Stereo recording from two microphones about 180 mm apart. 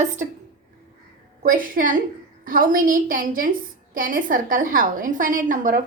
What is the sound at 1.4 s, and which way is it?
A woman's voice, 50° right (ahead or behind).